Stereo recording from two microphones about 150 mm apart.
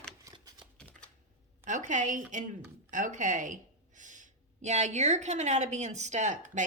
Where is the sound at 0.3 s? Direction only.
20° right (ahead or behind).